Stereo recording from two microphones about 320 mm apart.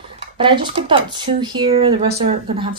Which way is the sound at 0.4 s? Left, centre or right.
Centre.